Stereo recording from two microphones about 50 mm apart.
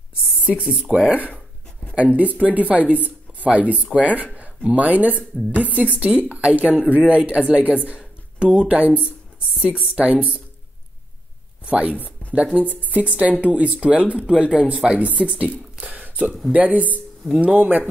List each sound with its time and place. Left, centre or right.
0.5 s speech: centre
11.6 s speech: right
15.8 s a sound: right
16.5 s speech: right